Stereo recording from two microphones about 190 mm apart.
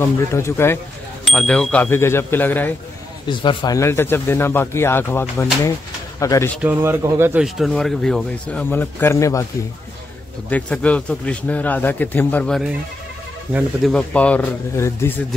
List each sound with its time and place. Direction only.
0.0 s a man's voice: 15° left (ahead or behind)
1.2 s a man's voice: 5° left (ahead or behind)
3.3 s a man's voice: 25° left (ahead or behind)
6.6 s speech: 10° right (ahead or behind)
7.4 s a man's voice: centre (ahead or behind); by 9.5 s 15° left (ahead or behind)
10.5 s a man's voice: 5° left (ahead or behind)
13.5 s speech: 10° right (ahead or behind)
13.9 s a man's voice: 5° left (ahead or behind)